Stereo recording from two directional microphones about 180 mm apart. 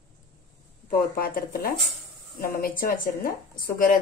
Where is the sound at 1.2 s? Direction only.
55° left (ahead or behind).